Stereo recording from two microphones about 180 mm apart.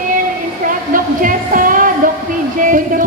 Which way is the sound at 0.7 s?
50° right (ahead or behind).